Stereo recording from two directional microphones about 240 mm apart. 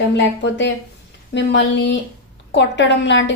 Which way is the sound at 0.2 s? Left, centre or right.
Left.